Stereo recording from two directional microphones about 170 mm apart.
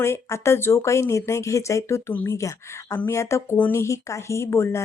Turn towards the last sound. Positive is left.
turn(degrees=15)  # may be behind; listen again after turning